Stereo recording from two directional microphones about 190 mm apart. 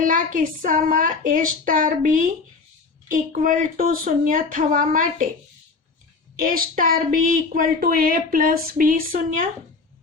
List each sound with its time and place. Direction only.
0.0 s a woman's voice: 45° right (ahead or behind)
6.4 s a woman's voice: 50° right (ahead or behind)